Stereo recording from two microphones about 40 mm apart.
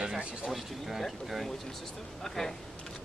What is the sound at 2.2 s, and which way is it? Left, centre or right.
Speech, centre.